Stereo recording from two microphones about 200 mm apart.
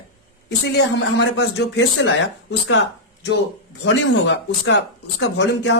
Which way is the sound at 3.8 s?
65° left (ahead or behind).